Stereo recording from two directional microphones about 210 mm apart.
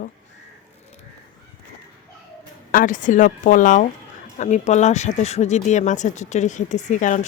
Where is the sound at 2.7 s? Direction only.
40° left (ahead or behind).